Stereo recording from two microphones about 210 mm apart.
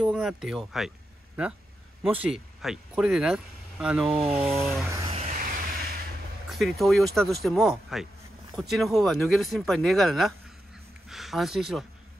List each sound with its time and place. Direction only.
0.0 s speech: centre (ahead or behind)
4.8 s a sound: 15° right (ahead or behind)
5.1 s vehicle: 35° right (ahead or behind)
6.5 s speech: centre (ahead or behind)